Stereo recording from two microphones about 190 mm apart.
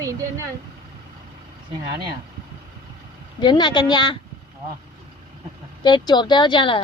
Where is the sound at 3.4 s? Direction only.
25° left (ahead or behind).